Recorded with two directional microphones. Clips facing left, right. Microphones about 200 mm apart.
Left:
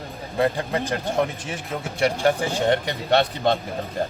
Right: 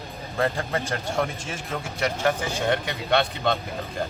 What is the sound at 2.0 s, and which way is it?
Speech, 30° left (ahead or behind).